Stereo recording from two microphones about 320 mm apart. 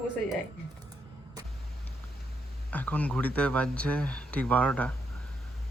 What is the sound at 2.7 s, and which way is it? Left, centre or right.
Speech, centre.